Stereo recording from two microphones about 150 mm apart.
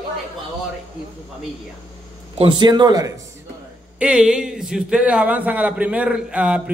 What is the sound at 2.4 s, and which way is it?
Speech, 30° right (ahead or behind).